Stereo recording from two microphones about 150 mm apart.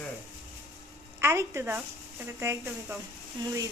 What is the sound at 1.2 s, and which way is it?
A woman's voice, 15° right (ahead or behind).